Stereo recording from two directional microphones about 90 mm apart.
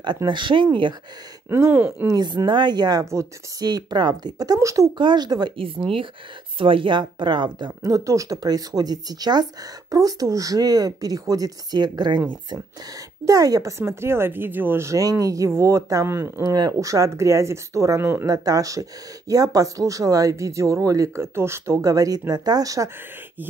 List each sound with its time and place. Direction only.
0.3 s a woman's voice: 65° right (ahead or behind)
1.5 s speech: 25° right (ahead or behind)
2.0 s speech: 50° right (ahead or behind)
3.1 s speech: 35° right (ahead or behind)
3.6 s speech: 50° right (ahead or behind)
4.9 s speech: 55° right (ahead or behind)
5.6 s speech: 90° right
6.6 s a woman's voice: 75° right (ahead or behind); by 7.7 s 55° right (ahead or behind)
7.8 s speech: 35° right (ahead or behind)
13.2 s speech: 40° right (ahead or behind)
16.5 s speech: 45° right (ahead or behind)
18.3 s speech: 40° right (ahead or behind)